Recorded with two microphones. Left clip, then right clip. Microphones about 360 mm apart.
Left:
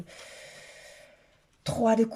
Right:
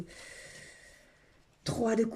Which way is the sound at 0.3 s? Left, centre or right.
Left.